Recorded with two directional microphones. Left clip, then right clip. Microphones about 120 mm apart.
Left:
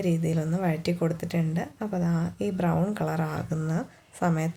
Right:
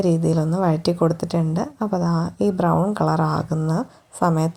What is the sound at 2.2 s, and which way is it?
Speech, 35° right (ahead or behind).